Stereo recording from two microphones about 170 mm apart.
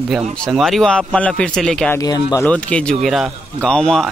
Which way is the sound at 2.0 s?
20° left (ahead or behind).